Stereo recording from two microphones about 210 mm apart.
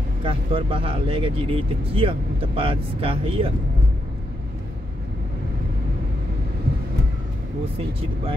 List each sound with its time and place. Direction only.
0.2 s speech: 25° right (ahead or behind)